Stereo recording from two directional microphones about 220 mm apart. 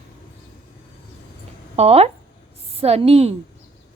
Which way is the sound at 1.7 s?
25° right (ahead or behind).